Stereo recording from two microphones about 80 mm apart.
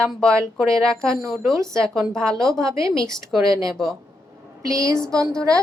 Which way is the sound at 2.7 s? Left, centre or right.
Right.